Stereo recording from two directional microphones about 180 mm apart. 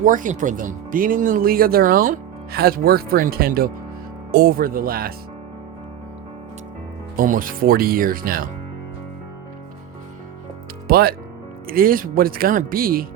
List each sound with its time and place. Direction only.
0.0 s speech: 45° right (ahead or behind)
7.2 s speech: 50° right (ahead or behind)
10.8 s speech: 60° right (ahead or behind)